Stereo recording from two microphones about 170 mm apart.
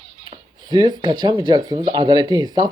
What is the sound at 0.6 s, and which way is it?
A man's voice, 25° right (ahead or behind).